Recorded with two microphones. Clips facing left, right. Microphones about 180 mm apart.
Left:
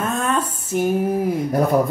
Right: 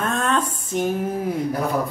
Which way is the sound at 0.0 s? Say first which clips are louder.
Left 1 dB; 5° left (ahead or behind).